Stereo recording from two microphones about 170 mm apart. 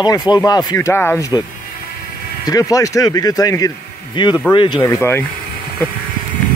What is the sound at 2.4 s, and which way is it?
Speech, 20° left (ahead or behind).